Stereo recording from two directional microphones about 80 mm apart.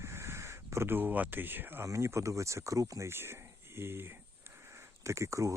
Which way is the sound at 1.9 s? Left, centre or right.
Right.